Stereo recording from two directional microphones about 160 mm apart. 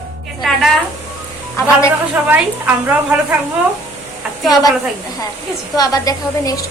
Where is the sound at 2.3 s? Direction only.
10° right (ahead or behind).